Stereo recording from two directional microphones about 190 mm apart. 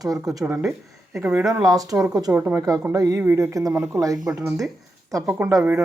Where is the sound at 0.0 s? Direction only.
20° right (ahead or behind).